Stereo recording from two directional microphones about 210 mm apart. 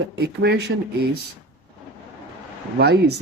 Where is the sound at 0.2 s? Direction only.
50° right (ahead or behind).